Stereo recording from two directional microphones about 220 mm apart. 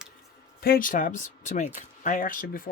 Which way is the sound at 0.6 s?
40° left (ahead or behind).